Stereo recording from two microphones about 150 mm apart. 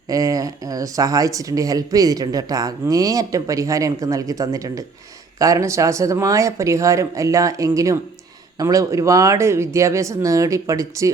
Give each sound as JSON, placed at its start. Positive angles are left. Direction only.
{"t": 0.1, "sound": "speech", "side_deg": -20}